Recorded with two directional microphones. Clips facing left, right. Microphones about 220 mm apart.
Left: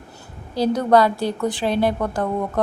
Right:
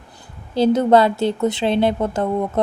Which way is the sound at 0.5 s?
25° right (ahead or behind).